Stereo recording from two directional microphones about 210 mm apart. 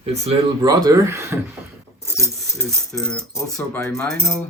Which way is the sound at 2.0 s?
15° right (ahead or behind).